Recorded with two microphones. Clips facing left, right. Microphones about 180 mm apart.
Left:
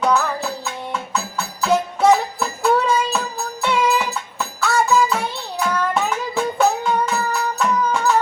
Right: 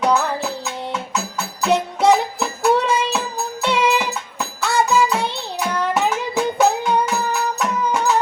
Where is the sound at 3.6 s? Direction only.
20° right (ahead or behind).